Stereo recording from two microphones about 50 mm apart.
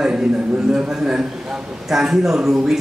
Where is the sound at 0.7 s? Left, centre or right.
Centre.